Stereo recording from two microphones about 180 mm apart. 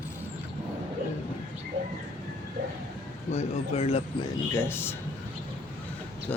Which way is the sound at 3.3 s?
35° left (ahead or behind).